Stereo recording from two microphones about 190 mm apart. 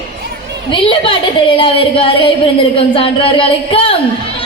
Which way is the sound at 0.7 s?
25° left (ahead or behind).